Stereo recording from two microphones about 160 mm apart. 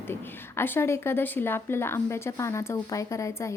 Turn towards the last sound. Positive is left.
turn(degrees=15)  # may be behind; listen again after turning